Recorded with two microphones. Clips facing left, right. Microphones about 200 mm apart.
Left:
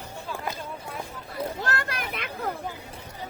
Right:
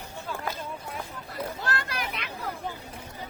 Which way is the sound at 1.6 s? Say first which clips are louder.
Left 1 dB; 50° left (ahead or behind).